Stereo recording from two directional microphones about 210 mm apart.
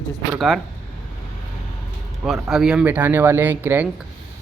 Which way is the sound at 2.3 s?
Centre (ahead or behind).